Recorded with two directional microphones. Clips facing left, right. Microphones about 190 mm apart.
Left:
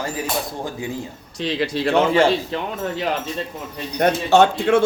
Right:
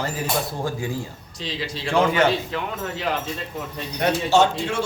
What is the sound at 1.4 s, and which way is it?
Speech, 60° left (ahead or behind).